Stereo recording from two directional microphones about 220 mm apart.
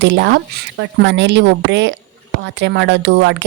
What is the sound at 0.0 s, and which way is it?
Speech, 50° right (ahead or behind).